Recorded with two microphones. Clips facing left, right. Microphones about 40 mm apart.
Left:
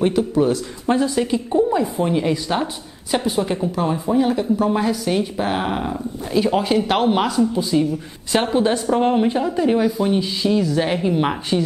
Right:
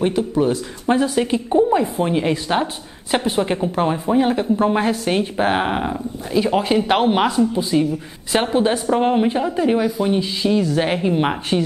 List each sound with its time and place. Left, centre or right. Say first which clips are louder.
0.0 s a man's voice: left 1 dB; centre
3.1 s speech: right 1 dB; right
6.3 s a man's voice: even; centre
10.6 s a man's voice: right 1 dB; centre